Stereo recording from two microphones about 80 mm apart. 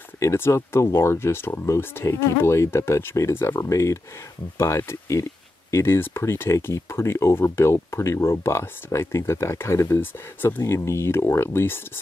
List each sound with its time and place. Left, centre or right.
0.2 s speech: left